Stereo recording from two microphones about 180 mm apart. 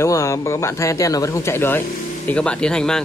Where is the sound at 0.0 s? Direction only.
15° left (ahead or behind).